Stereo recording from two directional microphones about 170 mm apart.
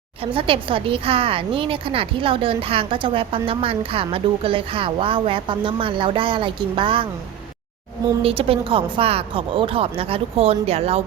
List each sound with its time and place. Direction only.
0.3 s a woman's voice: 30° right (ahead or behind)
8.2 s a woman's voice: 35° right (ahead or behind)